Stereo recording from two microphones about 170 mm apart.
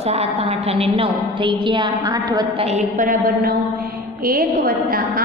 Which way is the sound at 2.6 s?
45° right (ahead or behind).